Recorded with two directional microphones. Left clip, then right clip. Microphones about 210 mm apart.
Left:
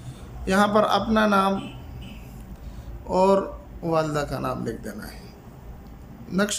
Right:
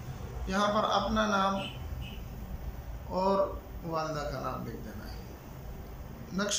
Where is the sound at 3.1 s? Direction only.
45° left (ahead or behind).